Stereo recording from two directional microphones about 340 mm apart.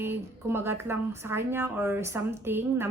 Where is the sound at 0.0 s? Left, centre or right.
Centre.